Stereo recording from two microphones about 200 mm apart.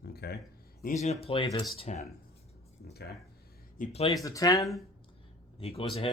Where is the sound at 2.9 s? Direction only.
55° left (ahead or behind).